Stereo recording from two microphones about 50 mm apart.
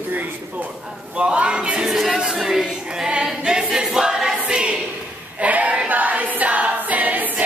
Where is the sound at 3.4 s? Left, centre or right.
Centre.